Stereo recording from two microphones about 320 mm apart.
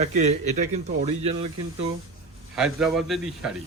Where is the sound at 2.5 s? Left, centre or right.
Centre.